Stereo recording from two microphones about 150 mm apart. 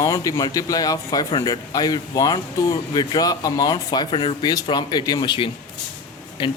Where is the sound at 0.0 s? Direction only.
25° left (ahead or behind).